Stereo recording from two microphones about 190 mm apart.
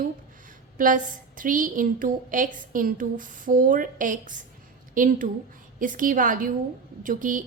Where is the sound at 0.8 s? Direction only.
45° right (ahead or behind).